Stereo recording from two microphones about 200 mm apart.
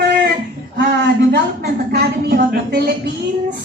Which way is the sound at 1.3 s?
50° right (ahead or behind).